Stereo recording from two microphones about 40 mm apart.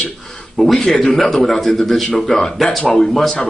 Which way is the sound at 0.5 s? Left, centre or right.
Centre.